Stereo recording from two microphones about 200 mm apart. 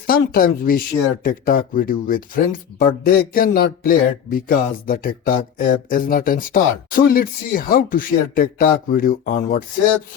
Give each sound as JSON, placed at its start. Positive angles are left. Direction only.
{"t": 0.1, "sound": "speech", "side_deg": 45}